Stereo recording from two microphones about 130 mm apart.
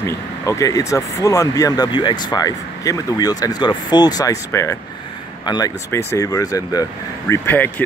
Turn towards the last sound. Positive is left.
turn(degrees=15)  # may be behind; listen again after turning